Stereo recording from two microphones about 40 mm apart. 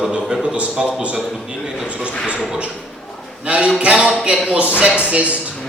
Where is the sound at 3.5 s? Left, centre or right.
Right.